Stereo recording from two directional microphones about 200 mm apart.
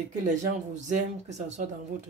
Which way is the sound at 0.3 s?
40° right (ahead or behind).